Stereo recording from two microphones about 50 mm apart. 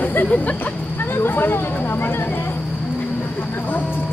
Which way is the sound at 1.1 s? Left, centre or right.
Left.